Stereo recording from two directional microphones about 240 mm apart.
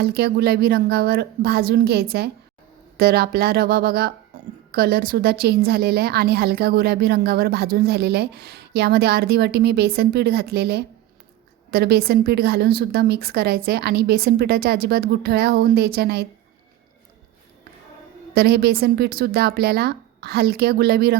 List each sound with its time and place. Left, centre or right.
0.0 s a woman's voice: right
18.3 s a woman's voice: right